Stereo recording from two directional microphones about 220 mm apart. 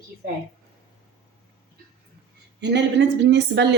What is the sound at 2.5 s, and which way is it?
A woman's voice, 50° right (ahead or behind).